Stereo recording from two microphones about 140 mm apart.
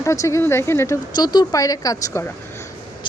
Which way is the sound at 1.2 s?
30° left (ahead or behind).